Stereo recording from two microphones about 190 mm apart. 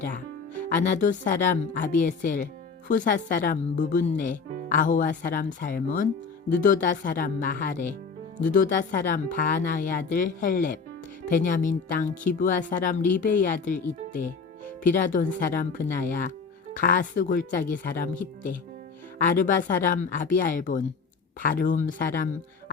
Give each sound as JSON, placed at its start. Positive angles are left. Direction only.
{"t": 0.7, "sound": "a woman's voice", "side_deg": 40}
{"t": 14.8, "sound": "a woman's voice", "side_deg": 45}